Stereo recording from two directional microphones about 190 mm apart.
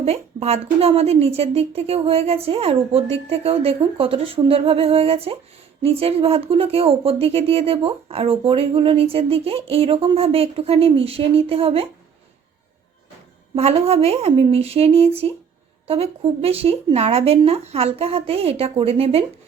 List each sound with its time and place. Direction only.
0.0 s speech: 35° right (ahead or behind)
13.6 s speech: 35° right (ahead or behind)